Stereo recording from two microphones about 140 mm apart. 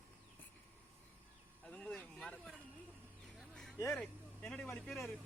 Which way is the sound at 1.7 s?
10° left (ahead or behind).